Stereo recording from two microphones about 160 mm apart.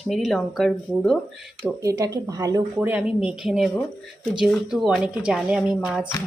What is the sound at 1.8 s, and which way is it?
Speech, 20° right (ahead or behind).